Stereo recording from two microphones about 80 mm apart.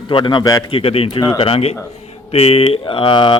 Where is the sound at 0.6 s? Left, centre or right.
Left.